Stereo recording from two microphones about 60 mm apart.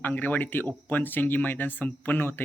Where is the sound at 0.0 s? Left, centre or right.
Left.